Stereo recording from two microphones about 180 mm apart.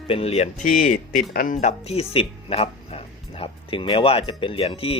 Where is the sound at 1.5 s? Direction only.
35° left (ahead or behind).